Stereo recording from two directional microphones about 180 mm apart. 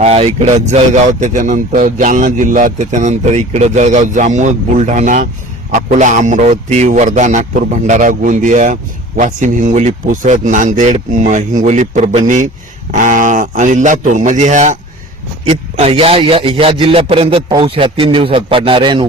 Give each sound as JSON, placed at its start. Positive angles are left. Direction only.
{"t": 0.0, "sound": "a man's voice", "side_deg": -35}